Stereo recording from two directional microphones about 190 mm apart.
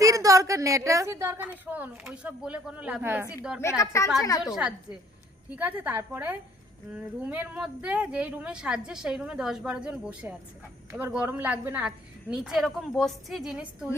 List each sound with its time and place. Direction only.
0.0 s a woman's voice: 15° right (ahead or behind)
3.6 s a woman's voice: 15° left (ahead or behind)
4.5 s a woman's voice: 5° right (ahead or behind)